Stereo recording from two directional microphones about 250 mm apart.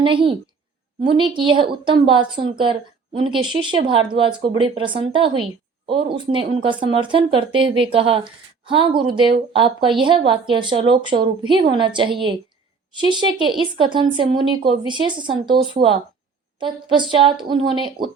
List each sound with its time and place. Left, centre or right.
0.0 s speech: centre